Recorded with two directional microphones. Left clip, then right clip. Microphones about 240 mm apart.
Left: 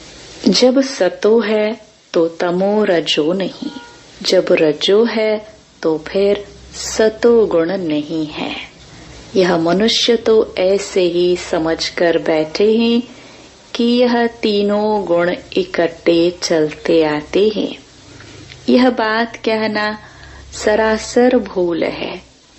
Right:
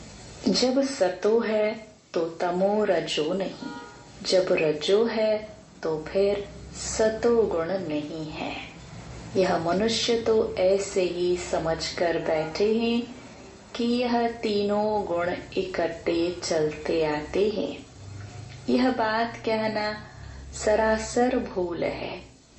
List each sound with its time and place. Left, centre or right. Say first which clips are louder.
0.4 s speech: left 11 dB; left
18.6 s speech: left 11 dB; left